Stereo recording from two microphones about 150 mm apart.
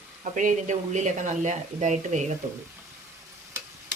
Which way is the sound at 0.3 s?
55° right (ahead or behind).